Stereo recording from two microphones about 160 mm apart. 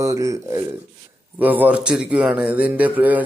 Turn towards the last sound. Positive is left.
turn(degrees=-10)  # may be behind; listen again after turning